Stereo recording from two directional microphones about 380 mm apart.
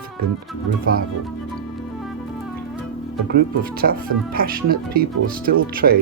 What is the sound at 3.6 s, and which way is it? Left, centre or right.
Speech, right.